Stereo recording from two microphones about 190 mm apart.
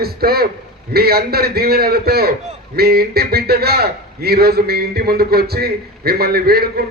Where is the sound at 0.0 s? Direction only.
55° right (ahead or behind).